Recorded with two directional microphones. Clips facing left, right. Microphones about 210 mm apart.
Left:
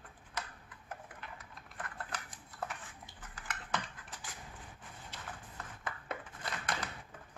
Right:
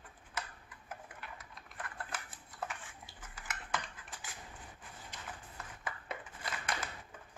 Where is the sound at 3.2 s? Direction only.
10° right (ahead or behind).